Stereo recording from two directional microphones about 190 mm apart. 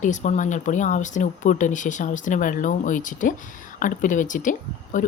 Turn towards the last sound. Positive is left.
turn(degrees=40)  # may be behind; listen again after turning